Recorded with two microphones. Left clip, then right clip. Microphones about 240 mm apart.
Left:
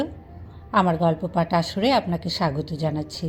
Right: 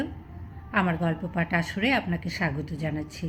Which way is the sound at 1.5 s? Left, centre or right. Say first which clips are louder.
Left 4 dB; centre.